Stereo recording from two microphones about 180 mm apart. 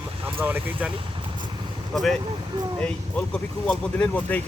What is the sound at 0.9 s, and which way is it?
Vehicle, 30° right (ahead or behind).